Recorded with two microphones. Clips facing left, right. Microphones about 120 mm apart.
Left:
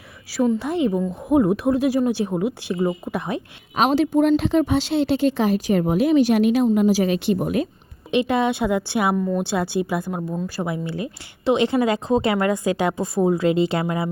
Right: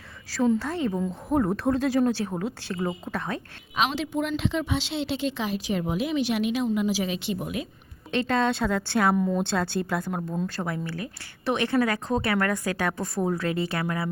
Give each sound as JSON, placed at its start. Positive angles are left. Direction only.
{"t": 0.3, "sound": "speech", "side_deg": 10}
{"t": 3.8, "sound": "a woman's voice", "side_deg": 45}
{"t": 8.1, "sound": "speech", "side_deg": 15}